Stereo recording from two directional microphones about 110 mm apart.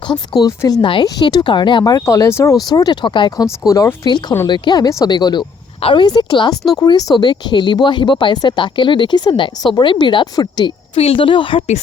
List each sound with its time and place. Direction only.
0.1 s speech: 40° left (ahead or behind)
2.6 s speech: 40° left (ahead or behind)
3.7 s speech: 30° left (ahead or behind)
4.0 s speech: 40° left (ahead or behind)
10.9 s speech: 60° left (ahead or behind)